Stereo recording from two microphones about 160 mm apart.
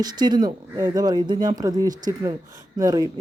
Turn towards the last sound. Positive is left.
turn(degrees=-25)  # may be behind; listen again after turning